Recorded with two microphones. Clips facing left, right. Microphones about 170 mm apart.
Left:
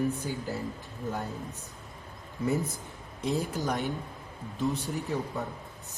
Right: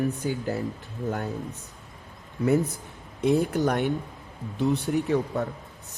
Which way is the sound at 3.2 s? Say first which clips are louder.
Right 8 dB; 60° right (ahead or behind).